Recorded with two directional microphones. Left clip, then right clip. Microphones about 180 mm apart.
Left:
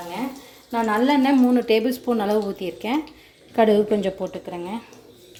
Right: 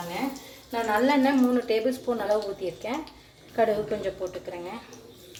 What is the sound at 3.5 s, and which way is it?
Speech, 50° left (ahead or behind).